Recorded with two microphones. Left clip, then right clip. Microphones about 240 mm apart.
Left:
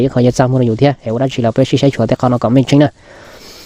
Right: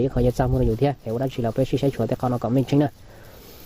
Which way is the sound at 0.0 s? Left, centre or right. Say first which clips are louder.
Left 10 dB; left.